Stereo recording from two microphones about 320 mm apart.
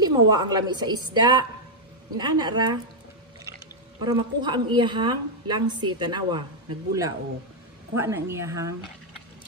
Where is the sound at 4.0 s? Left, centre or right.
Centre.